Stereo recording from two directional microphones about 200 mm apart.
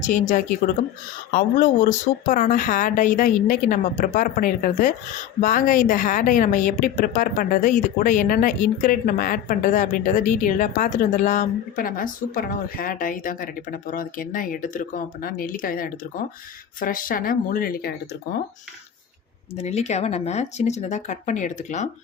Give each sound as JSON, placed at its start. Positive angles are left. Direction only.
{"t": 0.0, "sound": "a woman's voice", "side_deg": 40}
{"t": 19.5, "sound": "a woman's voice", "side_deg": 35}